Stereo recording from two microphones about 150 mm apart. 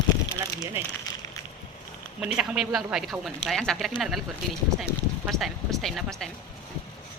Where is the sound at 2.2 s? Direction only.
5° right (ahead or behind).